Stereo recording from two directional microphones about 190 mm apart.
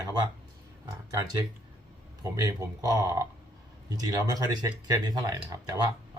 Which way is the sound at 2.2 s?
20° right (ahead or behind).